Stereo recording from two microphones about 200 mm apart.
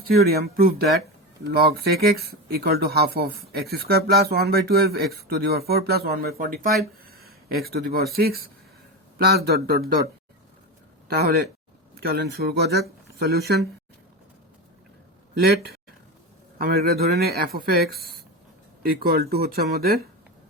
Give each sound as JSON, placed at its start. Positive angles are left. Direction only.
{"t": 0.2, "sound": "speech", "side_deg": -50}
{"t": 11.1, "sound": "speech", "side_deg": -50}
{"t": 16.6, "sound": "speech", "side_deg": -50}